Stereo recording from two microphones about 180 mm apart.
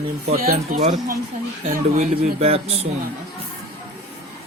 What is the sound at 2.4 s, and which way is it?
Speech, 35° right (ahead or behind).